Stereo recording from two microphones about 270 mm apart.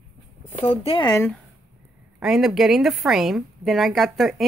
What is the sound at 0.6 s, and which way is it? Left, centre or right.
Speech, centre.